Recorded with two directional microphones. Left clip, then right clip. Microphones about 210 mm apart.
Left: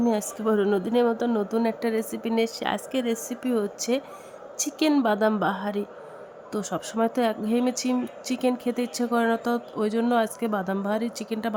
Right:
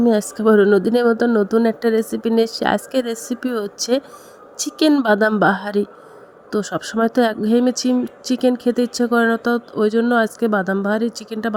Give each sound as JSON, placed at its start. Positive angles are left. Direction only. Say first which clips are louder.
{"t": 0.0, "sound": "speech", "louder": "right 9 dB", "side_deg": -25}